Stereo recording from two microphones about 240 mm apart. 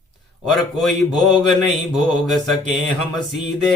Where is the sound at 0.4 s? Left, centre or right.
Centre.